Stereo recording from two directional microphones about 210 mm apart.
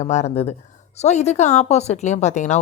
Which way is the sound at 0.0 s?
35° left (ahead or behind).